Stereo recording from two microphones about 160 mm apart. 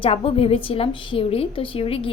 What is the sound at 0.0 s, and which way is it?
A woman's voice, 35° left (ahead or behind).